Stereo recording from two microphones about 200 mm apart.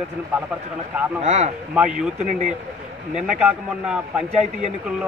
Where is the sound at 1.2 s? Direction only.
35° right (ahead or behind).